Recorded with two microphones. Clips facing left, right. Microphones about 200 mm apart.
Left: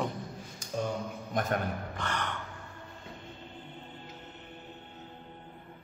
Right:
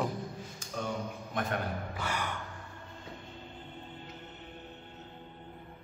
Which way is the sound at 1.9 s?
10° right (ahead or behind).